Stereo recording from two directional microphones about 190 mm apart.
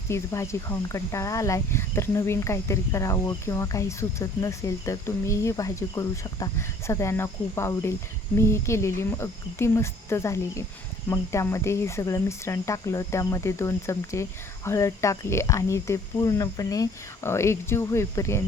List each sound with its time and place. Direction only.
0.1 s speech: 15° left (ahead or behind)